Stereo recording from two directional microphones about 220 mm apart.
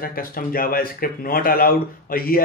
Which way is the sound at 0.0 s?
40° left (ahead or behind).